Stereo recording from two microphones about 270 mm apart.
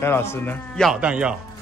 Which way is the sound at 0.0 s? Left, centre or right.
Centre.